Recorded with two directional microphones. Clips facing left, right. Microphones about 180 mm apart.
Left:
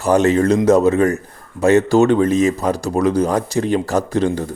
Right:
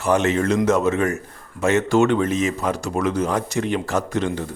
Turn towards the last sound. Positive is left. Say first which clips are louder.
# left 5 dB
turn(degrees=35)  # may be behind; listen again after turning